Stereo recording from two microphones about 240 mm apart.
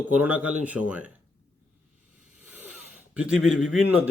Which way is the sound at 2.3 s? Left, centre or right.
Centre.